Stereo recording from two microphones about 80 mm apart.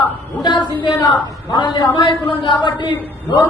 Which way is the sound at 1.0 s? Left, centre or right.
Left.